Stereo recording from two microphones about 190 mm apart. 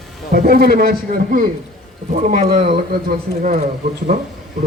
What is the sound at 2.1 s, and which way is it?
Speech, 40° right (ahead or behind).